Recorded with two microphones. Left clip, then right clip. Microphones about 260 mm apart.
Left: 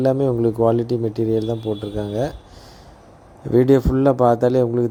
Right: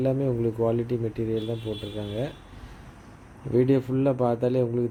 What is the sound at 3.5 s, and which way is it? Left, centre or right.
Speech, left.